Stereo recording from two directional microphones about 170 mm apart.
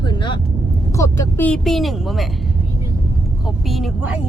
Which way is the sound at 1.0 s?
10° left (ahead or behind).